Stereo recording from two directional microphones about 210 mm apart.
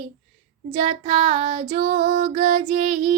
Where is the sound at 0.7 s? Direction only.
30° right (ahead or behind).